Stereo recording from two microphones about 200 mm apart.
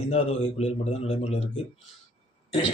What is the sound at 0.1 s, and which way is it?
Speech, 30° left (ahead or behind).